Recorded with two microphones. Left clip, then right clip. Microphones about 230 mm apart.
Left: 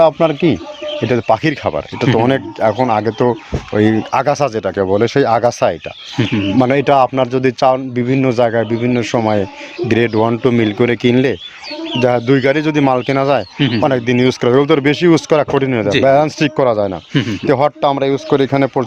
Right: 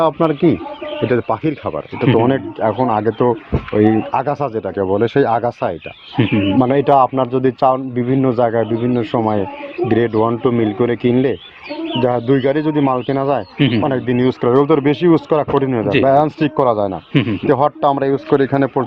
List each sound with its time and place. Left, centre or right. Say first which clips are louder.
0.0 s speech: left 3 dB; left
2.0 s speech: even; left
6.2 s speech: right 1 dB; left
6.6 s speech: left 1 dB; left
13.6 s speech: even; left
13.8 s speech: left 3 dB; left